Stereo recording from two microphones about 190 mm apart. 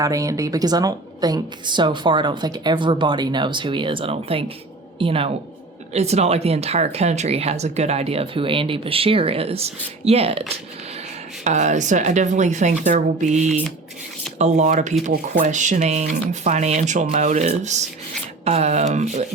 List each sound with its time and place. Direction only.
0.0 s a woman's voice: 15° right (ahead or behind)
11.4 s speech: 40° right (ahead or behind)